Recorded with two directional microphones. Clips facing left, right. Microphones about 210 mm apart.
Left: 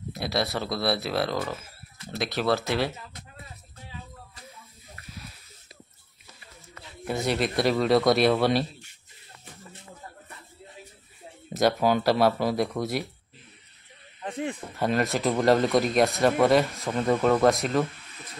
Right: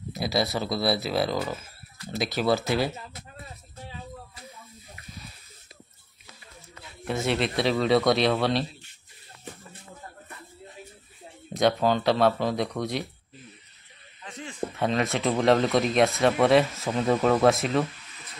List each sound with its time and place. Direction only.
0.1 s speech: centre (ahead or behind)
7.1 s speech: centre (ahead or behind)
11.5 s speech: 5° left (ahead or behind)
14.2 s speech: 55° left (ahead or behind)
14.8 s speech: centre (ahead or behind)